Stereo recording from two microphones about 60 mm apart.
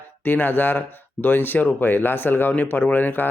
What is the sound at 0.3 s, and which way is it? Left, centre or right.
Speech, left.